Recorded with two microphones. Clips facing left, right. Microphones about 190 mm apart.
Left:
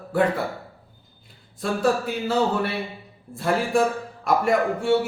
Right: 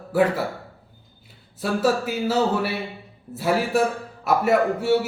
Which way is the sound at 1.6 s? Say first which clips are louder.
Right 1 dB; 5° right (ahead or behind).